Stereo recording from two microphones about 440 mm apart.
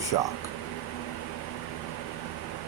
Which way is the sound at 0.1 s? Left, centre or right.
Left.